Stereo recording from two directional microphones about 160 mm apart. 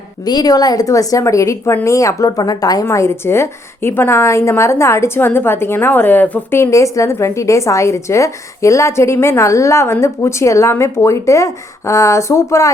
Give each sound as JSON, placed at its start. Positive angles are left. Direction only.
{"t": 0.3, "sound": "a woman's voice", "side_deg": 25}